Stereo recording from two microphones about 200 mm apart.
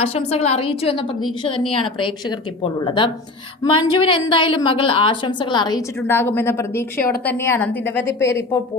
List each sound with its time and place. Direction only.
0.0 s a woman's voice: 30° left (ahead or behind); by 8.5 s 15° left (ahead or behind)